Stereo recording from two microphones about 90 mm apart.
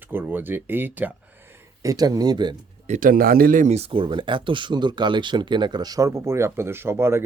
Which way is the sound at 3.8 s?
75° right (ahead or behind).